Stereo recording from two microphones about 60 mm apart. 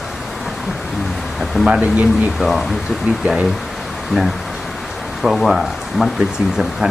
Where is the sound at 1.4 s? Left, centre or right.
Centre.